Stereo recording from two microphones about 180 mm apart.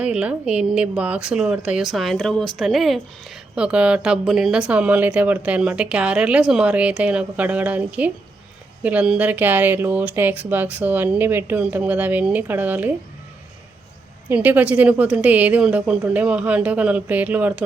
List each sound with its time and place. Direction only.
0.0 s a woman's voice: 5° right (ahead or behind)
14.3 s speech: 10° right (ahead or behind)